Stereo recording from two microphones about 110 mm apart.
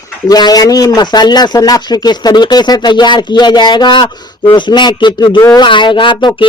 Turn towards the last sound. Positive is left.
turn(degrees=50)  # may be behind; listen again after turning